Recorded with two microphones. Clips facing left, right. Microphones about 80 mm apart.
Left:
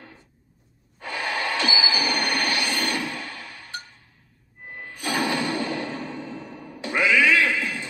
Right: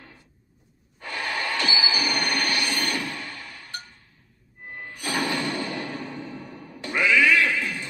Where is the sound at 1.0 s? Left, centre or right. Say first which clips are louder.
Left 2 dB; left.